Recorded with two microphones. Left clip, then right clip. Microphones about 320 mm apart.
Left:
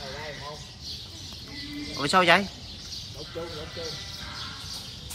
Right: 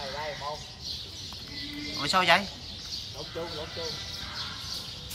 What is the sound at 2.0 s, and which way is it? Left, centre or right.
Speech, centre.